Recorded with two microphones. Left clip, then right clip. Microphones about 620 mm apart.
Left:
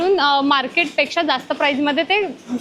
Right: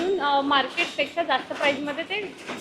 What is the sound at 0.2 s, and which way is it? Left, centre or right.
A woman's voice, left.